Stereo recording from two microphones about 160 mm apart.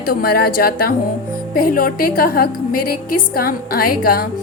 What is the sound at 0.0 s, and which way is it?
A woman's voice, 65° left (ahead or behind).